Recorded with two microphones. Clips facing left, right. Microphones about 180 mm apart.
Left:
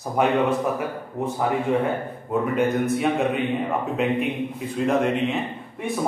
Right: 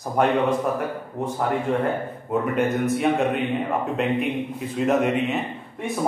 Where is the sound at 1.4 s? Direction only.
5° left (ahead or behind).